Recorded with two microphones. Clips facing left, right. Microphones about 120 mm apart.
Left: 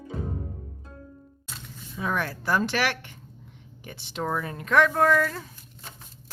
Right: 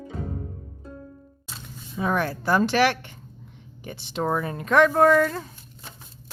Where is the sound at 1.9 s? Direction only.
35° right (ahead or behind).